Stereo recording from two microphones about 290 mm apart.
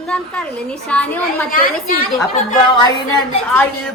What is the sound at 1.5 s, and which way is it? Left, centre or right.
Speech, left.